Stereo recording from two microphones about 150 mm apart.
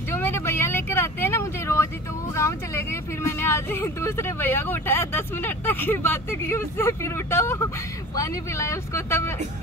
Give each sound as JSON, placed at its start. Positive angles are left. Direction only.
{"t": 0.1, "sound": "vehicle", "side_deg": 15}
{"t": 2.3, "sound": "speech", "side_deg": 20}